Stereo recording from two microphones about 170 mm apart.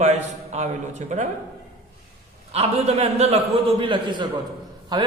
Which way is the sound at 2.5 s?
40° right (ahead or behind).